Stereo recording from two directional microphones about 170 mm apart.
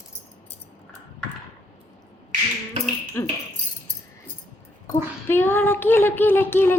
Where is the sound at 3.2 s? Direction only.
15° left (ahead or behind).